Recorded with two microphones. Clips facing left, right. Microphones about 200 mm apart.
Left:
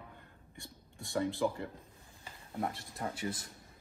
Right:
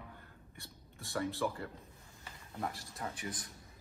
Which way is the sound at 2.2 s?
25° left (ahead or behind).